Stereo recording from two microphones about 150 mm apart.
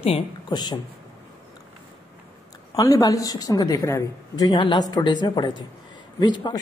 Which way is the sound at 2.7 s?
25° left (ahead or behind).